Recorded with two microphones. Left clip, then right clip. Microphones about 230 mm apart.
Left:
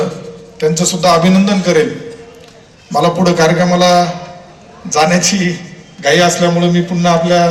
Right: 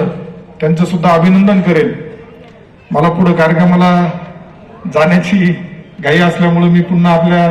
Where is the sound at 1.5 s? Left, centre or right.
Left.